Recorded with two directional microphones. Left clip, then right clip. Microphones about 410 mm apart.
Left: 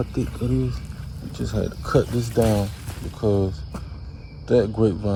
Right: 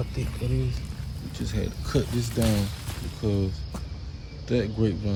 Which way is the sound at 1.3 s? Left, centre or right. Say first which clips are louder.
Left 6 dB; centre.